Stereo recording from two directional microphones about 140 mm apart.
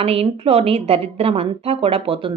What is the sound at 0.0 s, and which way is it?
A woman's voice, 45° right (ahead or behind).